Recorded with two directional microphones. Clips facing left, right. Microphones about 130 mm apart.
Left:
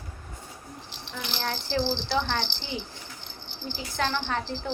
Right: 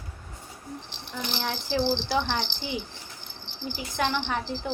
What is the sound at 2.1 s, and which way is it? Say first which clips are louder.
Speech: right 1 dB; 15° right (ahead or behind).